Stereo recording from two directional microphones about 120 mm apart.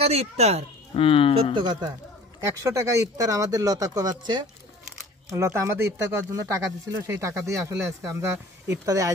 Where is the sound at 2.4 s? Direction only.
25° right (ahead or behind).